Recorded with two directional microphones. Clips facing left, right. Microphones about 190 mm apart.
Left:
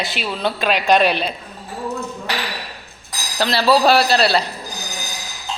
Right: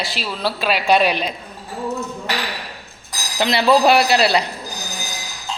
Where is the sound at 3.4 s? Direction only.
20° right (ahead or behind).